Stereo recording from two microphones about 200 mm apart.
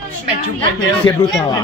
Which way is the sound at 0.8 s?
20° left (ahead or behind).